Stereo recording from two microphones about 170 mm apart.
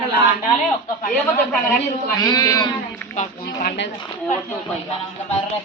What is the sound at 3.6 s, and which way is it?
Speech, 65° left (ahead or behind).